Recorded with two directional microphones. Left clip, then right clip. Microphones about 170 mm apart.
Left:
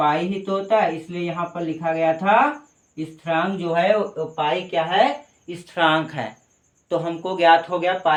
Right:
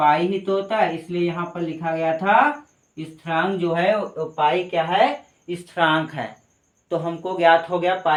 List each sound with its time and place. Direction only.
0.0 s speech: 20° left (ahead or behind)
5.5 s speech: 40° left (ahead or behind)